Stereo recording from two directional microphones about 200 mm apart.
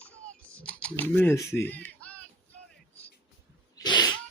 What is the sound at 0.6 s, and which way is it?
Speech, 5° left (ahead or behind).